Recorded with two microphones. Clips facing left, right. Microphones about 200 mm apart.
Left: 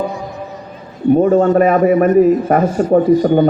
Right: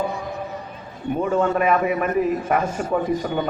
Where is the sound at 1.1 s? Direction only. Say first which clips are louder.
Left 10 dB; 40° left (ahead or behind).